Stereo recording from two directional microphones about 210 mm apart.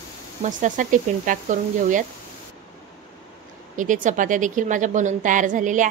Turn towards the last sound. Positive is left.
turn(degrees=-35)  # may be behind; listen again after turning